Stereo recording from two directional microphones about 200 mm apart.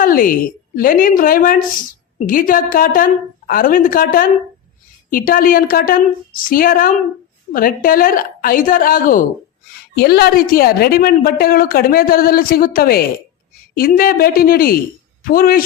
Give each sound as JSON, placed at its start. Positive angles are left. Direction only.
{"t": 0.0, "sound": "a woman's voice", "side_deg": 45}